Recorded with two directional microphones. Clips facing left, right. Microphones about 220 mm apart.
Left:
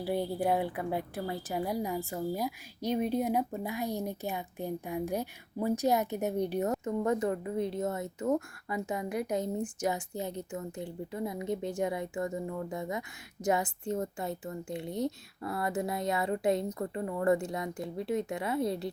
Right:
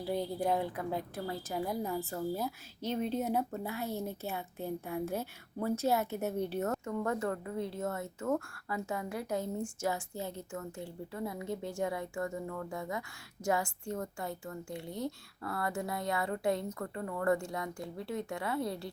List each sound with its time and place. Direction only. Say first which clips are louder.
0.0 s a woman's voice: left 3 dB; 5° left (ahead or behind)